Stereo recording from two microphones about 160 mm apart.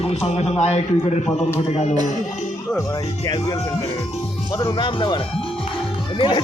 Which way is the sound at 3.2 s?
25° left (ahead or behind).